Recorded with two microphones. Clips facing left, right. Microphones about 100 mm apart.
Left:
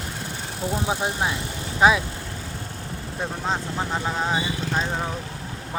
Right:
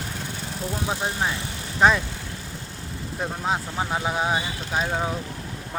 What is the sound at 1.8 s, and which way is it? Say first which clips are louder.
Speech: left 1 dB; 5° left (ahead or behind).